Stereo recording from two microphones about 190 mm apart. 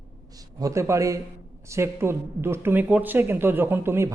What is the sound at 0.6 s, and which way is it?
Speech, 15° right (ahead or behind).